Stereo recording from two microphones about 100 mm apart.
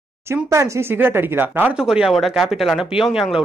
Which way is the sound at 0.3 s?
30° right (ahead or behind).